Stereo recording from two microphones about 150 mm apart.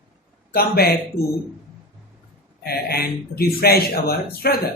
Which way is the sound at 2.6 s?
90° left.